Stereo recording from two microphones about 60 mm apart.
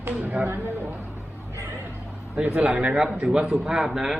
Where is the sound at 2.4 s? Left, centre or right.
Right; by 4.2 s centre.